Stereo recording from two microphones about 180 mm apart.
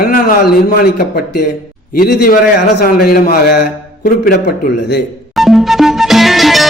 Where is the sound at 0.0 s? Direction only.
50° left (ahead or behind).